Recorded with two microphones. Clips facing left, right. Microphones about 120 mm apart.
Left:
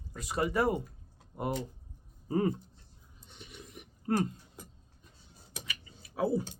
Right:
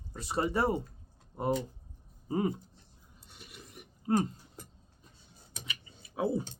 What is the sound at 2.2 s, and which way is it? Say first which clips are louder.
Speech: left 1 dB; 15° right (ahead or behind).